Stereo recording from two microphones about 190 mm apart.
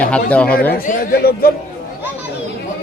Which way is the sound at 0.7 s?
45° left (ahead or behind).